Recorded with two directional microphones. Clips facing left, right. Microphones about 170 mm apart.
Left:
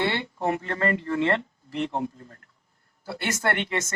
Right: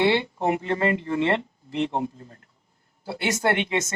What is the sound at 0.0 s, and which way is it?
Speech, 20° right (ahead or behind).